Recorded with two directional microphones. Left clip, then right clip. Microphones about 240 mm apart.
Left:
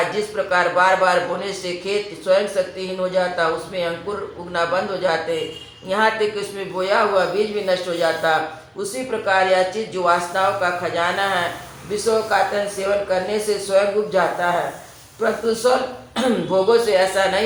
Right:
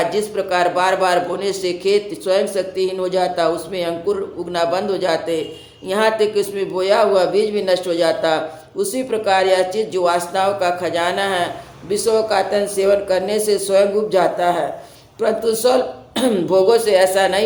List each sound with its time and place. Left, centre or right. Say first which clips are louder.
0.3 s a man's voice: left 1 dB; right